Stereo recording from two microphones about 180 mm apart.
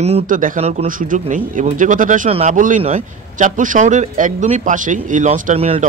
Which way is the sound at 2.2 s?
35° right (ahead or behind).